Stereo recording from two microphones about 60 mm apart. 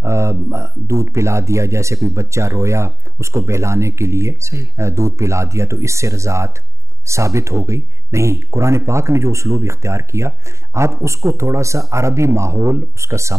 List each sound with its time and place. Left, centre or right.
0.0 s speech: right